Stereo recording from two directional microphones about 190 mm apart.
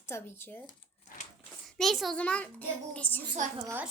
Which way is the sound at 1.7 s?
Centre (ahead or behind).